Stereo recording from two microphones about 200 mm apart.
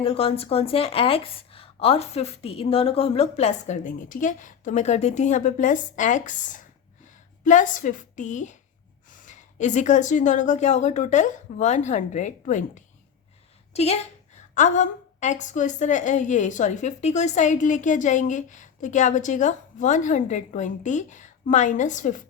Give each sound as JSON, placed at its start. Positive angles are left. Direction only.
{"t": 0.0, "sound": "a woman's voice", "side_deg": 30}